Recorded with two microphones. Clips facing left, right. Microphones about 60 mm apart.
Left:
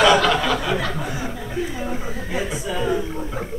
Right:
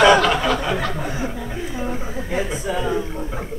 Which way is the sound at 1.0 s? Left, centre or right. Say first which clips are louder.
Right 2 dB; right.